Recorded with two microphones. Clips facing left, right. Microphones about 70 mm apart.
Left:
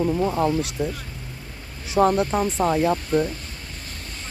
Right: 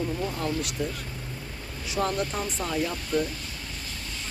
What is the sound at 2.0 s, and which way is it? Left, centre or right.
Speech, left.